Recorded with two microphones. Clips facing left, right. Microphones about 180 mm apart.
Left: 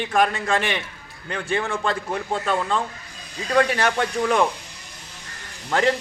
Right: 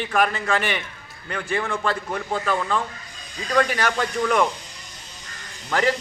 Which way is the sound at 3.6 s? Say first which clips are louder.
Left 2 dB; 25° left (ahead or behind).